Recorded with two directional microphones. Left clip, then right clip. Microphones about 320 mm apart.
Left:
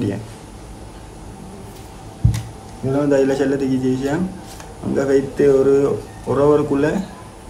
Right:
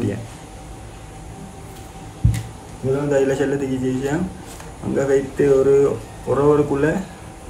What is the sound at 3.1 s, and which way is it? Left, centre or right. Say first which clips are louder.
A man's voice: left 2 dB; centre.